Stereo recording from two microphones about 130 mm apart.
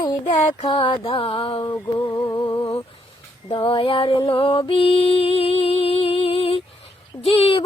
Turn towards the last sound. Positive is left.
turn(degrees=50)  # may be behind; listen again after turning